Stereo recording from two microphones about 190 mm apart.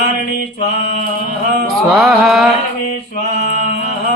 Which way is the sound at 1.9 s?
Centre (ahead or behind).